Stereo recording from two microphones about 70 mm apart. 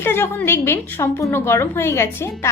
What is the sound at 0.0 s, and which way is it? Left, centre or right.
A woman's voice, left.